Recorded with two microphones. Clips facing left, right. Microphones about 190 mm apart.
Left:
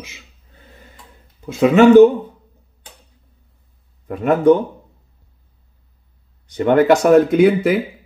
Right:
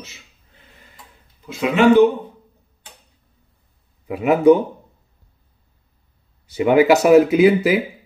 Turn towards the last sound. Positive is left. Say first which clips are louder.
# left 1 dB
turn(degrees=0)  # may be behind; listen again after turning